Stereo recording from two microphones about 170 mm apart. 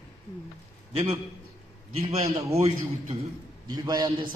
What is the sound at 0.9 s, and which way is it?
A man's voice, 35° right (ahead or behind).